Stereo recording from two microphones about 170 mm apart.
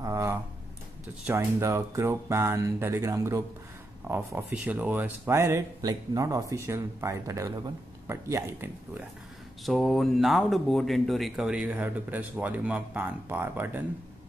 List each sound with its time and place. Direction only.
0.0 s a sound: 15° right (ahead or behind)
1.2 s speech: 15° right (ahead or behind)
9.7 s speech: centre (ahead or behind)